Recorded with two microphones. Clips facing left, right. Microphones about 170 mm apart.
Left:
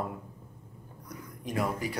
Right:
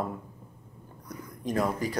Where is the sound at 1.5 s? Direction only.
40° right (ahead or behind).